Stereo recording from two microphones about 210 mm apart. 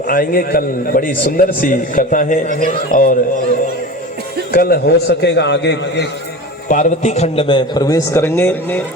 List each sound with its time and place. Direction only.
0.1 s a man's voice: 45° left (ahead or behind)
4.5 s a man's voice: 45° left (ahead or behind)
6.7 s a man's voice: 35° left (ahead or behind); by 8.8 s 10° left (ahead or behind)